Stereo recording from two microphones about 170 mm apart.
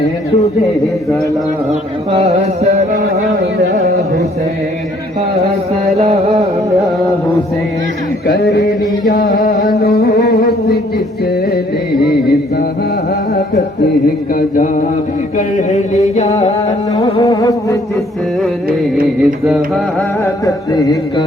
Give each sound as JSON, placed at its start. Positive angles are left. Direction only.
{"t": 2.1, "sound": "music", "side_deg": -35}
{"t": 6.0, "sound": "music", "side_deg": -40}
{"t": 9.0, "sound": "music", "side_deg": 55}
{"t": 14.3, "sound": "music", "side_deg": 55}
{"t": 16.9, "sound": "carnatic music", "side_deg": 20}
{"t": 19.2, "sound": "mantra", "side_deg": -5}
{"t": 20.2, "sound": "carnatic music", "side_deg": 20}